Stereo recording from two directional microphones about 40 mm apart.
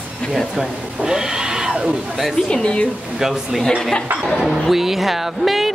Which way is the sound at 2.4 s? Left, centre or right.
Left.